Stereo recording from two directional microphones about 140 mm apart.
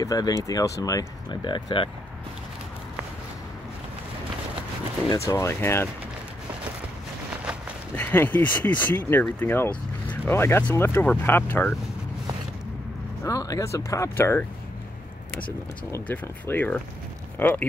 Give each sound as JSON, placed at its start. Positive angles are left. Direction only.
{"t": 0.0, "sound": "speech", "side_deg": 25}
{"t": 5.1, "sound": "speech", "side_deg": 20}
{"t": 7.9, "sound": "speech", "side_deg": 15}
{"t": 13.2, "sound": "speech", "side_deg": 25}
{"t": 15.9, "sound": "speech", "side_deg": 15}